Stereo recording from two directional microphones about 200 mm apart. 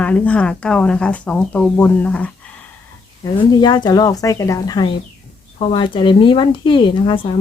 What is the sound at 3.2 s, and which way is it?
Speech, 20° left (ahead or behind).